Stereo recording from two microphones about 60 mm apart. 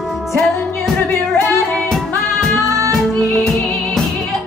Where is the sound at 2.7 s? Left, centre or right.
Right.